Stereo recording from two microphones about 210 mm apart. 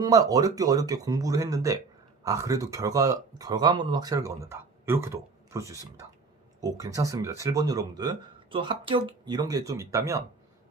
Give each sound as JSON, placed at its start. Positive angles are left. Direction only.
{"t": 0.0, "sound": "speech", "side_deg": -15}